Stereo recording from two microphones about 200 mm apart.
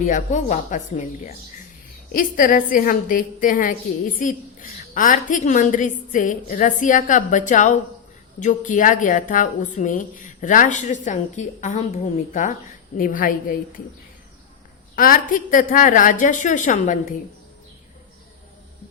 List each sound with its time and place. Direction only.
0.0 s a woman's voice: 40° left (ahead or behind)
14.9 s a woman's voice: 45° left (ahead or behind)